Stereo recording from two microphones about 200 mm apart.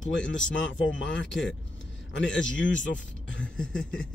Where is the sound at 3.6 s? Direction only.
5° left (ahead or behind).